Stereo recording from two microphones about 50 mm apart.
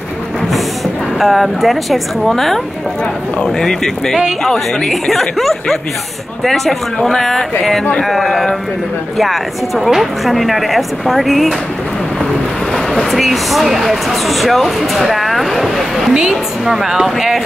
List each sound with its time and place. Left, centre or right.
1.1 s speech: centre
12.7 s speech: centre
16.1 s a woman's voice: centre
16.6 s speech: centre